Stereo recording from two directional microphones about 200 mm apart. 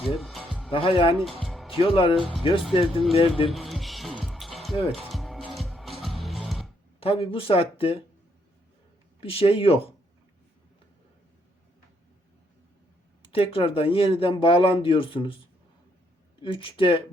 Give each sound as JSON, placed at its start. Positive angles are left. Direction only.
{"t": 0.0, "sound": "music", "side_deg": 0}
{"t": 0.7, "sound": "speech", "side_deg": 25}
{"t": 1.2, "sound": "music", "side_deg": 0}
{"t": 1.7, "sound": "speech", "side_deg": 30}
{"t": 3.5, "sound": "music", "side_deg": 0}
{"t": 7.0, "sound": "speech", "side_deg": 30}
{"t": 9.2, "sound": "speech", "side_deg": 30}
{"t": 13.3, "sound": "speech", "side_deg": 30}
{"t": 16.4, "sound": "speech", "side_deg": 25}